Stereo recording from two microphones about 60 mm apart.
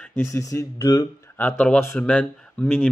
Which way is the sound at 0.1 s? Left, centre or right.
Left.